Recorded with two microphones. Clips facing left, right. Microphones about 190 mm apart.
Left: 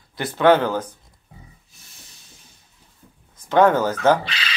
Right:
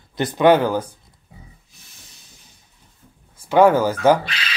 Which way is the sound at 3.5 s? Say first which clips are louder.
Right 2 dB; 10° right (ahead or behind).